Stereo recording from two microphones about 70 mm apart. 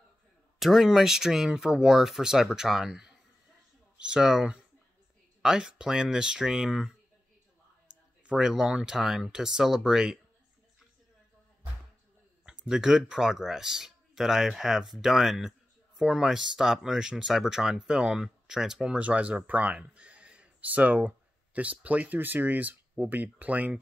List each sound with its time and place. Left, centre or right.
0.6 s speech: centre
8.2 s speech: centre
12.4 s speech: centre